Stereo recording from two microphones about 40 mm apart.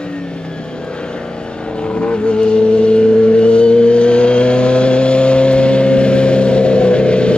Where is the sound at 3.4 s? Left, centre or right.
Left.